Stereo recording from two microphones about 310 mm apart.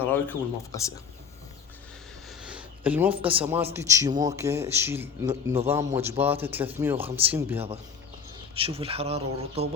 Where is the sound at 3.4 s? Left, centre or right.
Centre.